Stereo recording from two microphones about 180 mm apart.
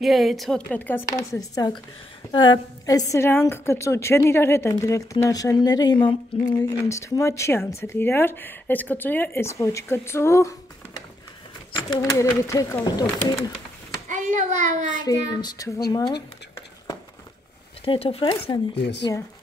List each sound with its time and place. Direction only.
0.0 s a woman's voice: centre (ahead or behind); by 1.8 s 20° left (ahead or behind)
2.3 s child singing: 25° left (ahead or behind)
3.1 s a woman's voice: 15° left (ahead or behind)
11.7 s a woman's voice: 20° left (ahead or behind)
14.0 s a sound: 45° right (ahead or behind)
15.0 s child singing: 20° left (ahead or behind)
17.8 s speech: 35° left (ahead or behind)
18.8 s speech: 75° left (ahead or behind)